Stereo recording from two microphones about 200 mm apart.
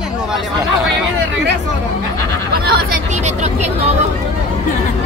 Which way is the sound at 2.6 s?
50° right (ahead or behind).